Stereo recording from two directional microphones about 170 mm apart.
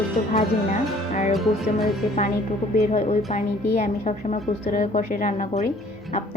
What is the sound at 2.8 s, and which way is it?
Speech, 40° left (ahead or behind).